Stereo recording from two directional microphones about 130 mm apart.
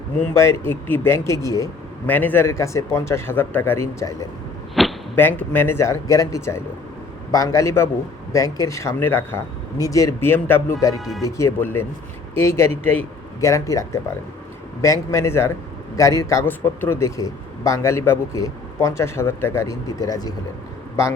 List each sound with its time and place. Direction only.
0.2 s a man's voice: 20° left (ahead or behind)
2.0 s a man's voice: 15° left (ahead or behind)
4.7 s arrow: centre (ahead or behind)
5.1 s a man's voice: 15° left (ahead or behind)